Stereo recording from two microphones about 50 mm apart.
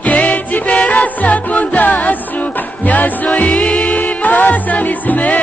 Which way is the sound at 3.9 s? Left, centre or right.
Left.